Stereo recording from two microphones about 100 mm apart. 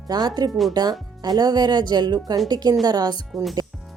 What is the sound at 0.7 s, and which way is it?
Speech, 40° right (ahead or behind).